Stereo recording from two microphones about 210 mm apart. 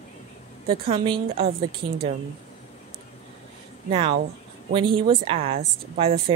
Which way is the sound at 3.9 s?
25° right (ahead or behind).